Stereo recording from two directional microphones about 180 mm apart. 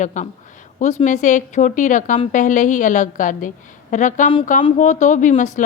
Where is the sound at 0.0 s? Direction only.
45° left (ahead or behind).